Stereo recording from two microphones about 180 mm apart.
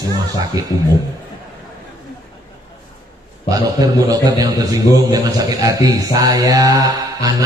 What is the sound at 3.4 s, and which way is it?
A man's voice, 20° right (ahead or behind).